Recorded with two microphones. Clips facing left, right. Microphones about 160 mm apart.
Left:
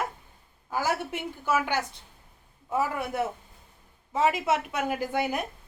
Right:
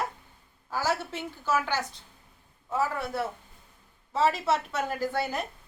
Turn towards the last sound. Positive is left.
turn(degrees=15)  # may be behind; listen again after turning